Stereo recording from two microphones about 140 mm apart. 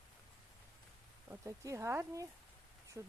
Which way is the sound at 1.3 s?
20° right (ahead or behind).